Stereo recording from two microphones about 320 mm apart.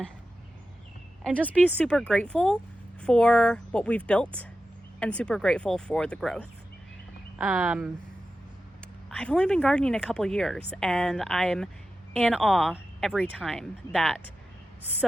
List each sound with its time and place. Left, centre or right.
1.2 s speech: centre
9.0 s speech: centre